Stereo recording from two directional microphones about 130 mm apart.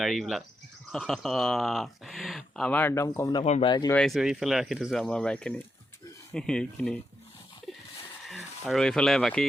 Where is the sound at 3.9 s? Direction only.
Centre (ahead or behind).